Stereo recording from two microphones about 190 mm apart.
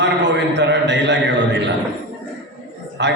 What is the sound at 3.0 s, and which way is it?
Speech, 65° right (ahead or behind).